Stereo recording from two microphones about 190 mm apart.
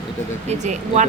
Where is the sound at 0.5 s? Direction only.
40° right (ahead or behind).